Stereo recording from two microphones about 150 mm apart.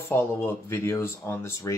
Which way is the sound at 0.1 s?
15° left (ahead or behind).